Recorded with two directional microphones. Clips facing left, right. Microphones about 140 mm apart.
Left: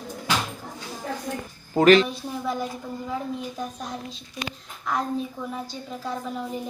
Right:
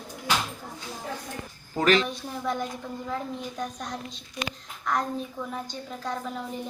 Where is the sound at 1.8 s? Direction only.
65° left (ahead or behind).